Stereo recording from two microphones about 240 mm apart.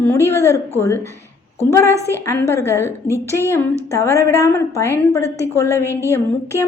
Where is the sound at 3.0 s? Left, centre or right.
Centre.